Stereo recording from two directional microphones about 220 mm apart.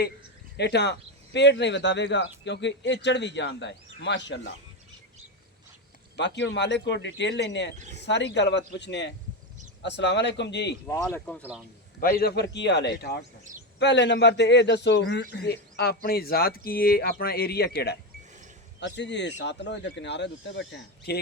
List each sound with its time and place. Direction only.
0.5 s speech: 50° left (ahead or behind)
6.1 s speech: 55° left (ahead or behind)
7.8 s speech: 35° right (ahead or behind)
8.0 s speech: 50° left (ahead or behind)
10.8 s speech: 15° left (ahead or behind)
11.9 s speech: 45° left (ahead or behind)